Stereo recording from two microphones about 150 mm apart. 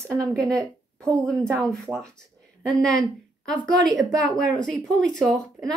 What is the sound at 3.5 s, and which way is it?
A woman's voice, 5° left (ahead or behind).